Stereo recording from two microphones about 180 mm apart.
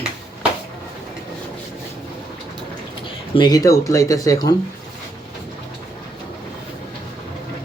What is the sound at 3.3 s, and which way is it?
Speech, 25° left (ahead or behind).